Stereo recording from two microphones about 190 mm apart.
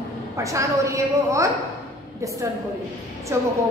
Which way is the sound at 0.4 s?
15° right (ahead or behind).